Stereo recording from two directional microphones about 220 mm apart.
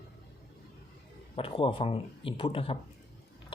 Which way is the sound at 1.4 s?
25° left (ahead or behind).